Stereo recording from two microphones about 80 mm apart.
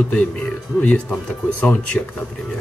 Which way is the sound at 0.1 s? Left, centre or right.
Centre.